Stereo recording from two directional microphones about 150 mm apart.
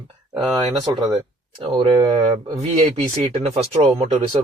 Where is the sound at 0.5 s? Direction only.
30° right (ahead or behind).